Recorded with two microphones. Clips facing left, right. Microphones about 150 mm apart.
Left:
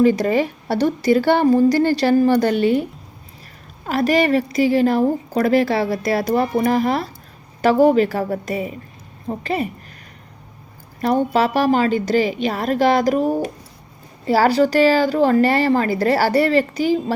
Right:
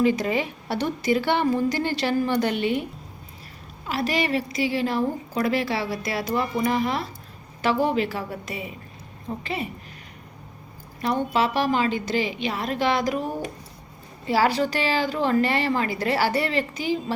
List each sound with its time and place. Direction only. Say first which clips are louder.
0.0 s a woman's voice: left 6 dB; 40° left (ahead or behind)
3.8 s a woman's voice: left 8 dB; 45° left (ahead or behind)
11.0 s a woman's voice: left 6 dB; 40° left (ahead or behind)